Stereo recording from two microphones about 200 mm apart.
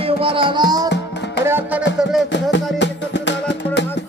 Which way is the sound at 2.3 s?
60° left (ahead or behind).